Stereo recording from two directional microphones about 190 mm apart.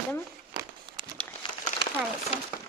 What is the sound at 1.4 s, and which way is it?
Crumpling, 25° left (ahead or behind).